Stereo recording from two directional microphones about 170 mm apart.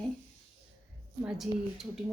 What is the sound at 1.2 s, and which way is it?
Speech, centre (ahead or behind).